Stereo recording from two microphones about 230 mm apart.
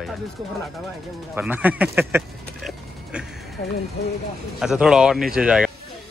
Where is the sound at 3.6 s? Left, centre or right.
Left.